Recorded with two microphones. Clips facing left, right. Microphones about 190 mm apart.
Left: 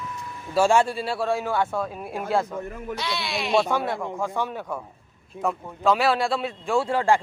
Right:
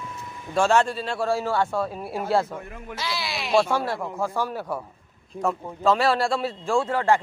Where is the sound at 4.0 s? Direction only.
5° right (ahead or behind); by 7.2 s 15° left (ahead or behind).